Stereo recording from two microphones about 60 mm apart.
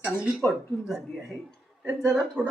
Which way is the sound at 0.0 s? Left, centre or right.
Right.